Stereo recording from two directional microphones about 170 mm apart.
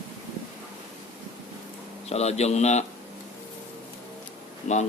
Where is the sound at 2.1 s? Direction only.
40° left (ahead or behind).